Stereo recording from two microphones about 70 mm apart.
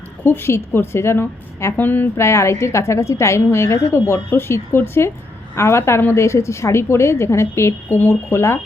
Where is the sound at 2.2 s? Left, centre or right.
Left.